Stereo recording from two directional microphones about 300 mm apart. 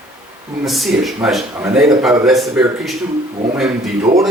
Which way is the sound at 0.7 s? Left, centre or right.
Centre.